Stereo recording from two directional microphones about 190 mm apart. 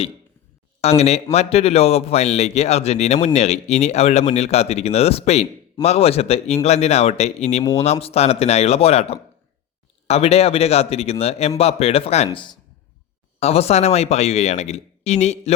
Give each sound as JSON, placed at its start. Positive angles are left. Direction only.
{"t": 0.8, "sound": "a man's voice", "side_deg": 35}